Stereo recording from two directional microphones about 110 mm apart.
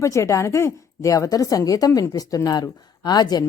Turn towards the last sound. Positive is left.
turn(degrees=40)  # may be behind; listen again after turning